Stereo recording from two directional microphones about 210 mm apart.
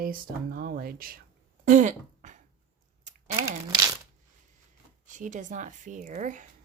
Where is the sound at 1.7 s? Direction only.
35° right (ahead or behind).